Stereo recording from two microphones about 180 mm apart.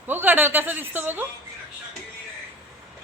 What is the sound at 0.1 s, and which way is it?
Speech, 10° right (ahead or behind).